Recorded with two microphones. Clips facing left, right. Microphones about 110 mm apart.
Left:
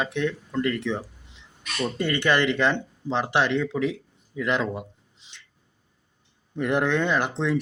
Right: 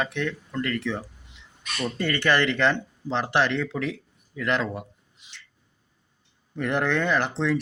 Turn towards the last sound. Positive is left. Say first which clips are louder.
# even
turn(degrees=15)  # may be behind; listen again after turning